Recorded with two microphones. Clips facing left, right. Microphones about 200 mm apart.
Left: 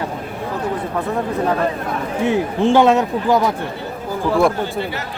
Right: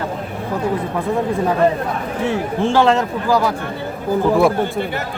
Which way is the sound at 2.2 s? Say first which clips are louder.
Left 3 dB; 15° left (ahead or behind).